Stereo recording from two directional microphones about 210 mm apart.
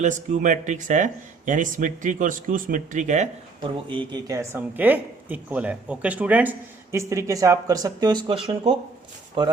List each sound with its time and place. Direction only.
0.0 s speech: 35° right (ahead or behind)
4.1 s speech: 15° right (ahead or behind)